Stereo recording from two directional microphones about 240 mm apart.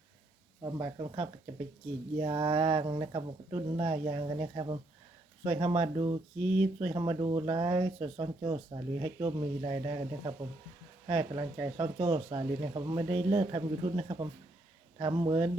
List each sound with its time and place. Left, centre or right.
0.6 s speech: centre